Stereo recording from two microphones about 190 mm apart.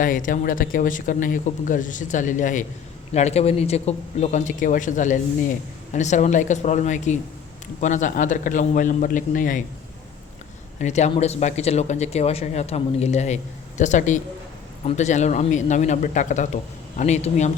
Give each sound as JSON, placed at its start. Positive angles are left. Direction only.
{"t": 0.0, "sound": "speech", "side_deg": 45}
{"t": 10.8, "sound": "speech", "side_deg": 40}